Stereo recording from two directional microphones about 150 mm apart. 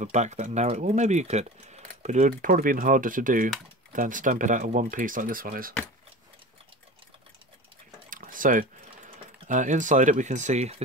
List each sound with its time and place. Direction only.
0.1 s speech: 50° right (ahead or behind); by 5.8 s 75° right (ahead or behind)
8.1 s typing: 65° right (ahead or behind); by 10.8 s 50° right (ahead or behind)